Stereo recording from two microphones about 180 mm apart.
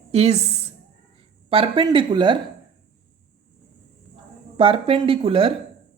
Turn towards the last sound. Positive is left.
turn(degrees=-30)  # may be behind; listen again after turning